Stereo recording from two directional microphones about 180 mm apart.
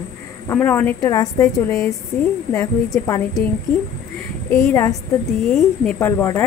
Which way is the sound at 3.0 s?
20° left (ahead or behind).